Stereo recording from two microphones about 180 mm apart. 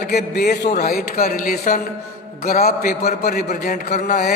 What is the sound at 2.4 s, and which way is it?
A man's voice, 55° left (ahead or behind).